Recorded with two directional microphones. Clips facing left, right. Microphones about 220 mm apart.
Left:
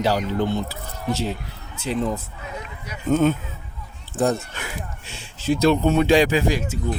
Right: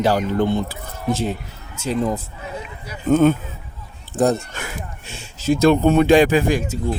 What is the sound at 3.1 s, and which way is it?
Speech, 55° right (ahead or behind).